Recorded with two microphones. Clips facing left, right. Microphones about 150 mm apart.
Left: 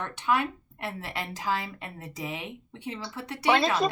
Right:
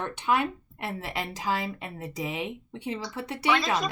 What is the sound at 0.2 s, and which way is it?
Speech, 20° right (ahead or behind).